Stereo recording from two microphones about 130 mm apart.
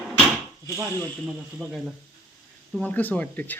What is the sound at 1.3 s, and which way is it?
Speech, 5° right (ahead or behind).